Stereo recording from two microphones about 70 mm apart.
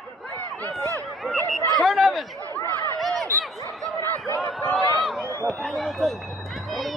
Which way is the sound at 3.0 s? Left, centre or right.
Centre.